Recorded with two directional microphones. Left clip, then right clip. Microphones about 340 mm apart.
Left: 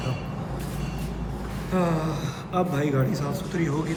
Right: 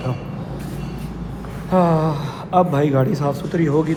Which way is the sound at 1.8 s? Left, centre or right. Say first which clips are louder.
Right 9 dB; centre.